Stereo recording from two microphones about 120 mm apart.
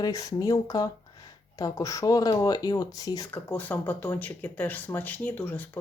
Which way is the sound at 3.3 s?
15° left (ahead or behind).